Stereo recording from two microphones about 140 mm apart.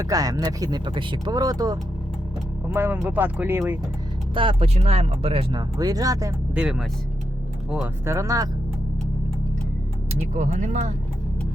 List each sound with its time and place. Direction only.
0.0 s speech: 25° right (ahead or behind)
2.6 s speech: 10° right (ahead or behind)
4.4 s speech: 40° right (ahead or behind)
5.5 s speech: 25° right (ahead or behind)
6.5 s speech: 5° right (ahead or behind)
8.0 s speech: 20° right (ahead or behind)
10.3 s speech: 60° right (ahead or behind)